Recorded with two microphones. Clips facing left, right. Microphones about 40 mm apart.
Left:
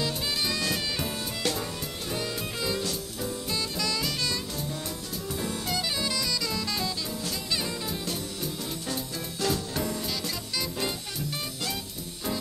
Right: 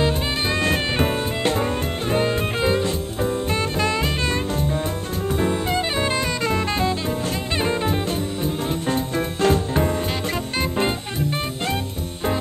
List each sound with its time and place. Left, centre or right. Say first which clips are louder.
0.0 s music: right 8 dB; right